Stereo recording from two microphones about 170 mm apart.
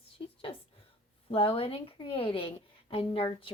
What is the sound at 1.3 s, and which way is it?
A woman's voice, 30° left (ahead or behind).